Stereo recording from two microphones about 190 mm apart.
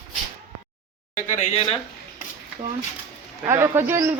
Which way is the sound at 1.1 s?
40° left (ahead or behind).